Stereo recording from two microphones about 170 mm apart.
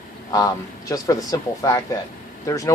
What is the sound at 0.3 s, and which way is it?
Speech, 20° left (ahead or behind).